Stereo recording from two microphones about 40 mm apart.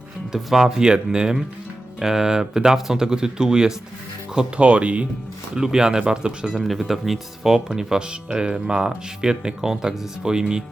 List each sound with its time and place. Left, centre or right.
0.3 s speech: centre
0.8 s speech: right
4.4 s speech: right
5.5 s speech: centre
6.7 s speech: centre